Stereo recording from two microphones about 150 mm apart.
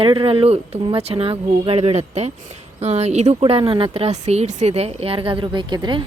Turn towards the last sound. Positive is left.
turn(degrees=-30)  # may be behind; listen again after turning